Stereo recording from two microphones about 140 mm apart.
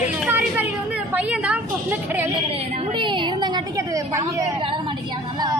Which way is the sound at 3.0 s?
35° right (ahead or behind).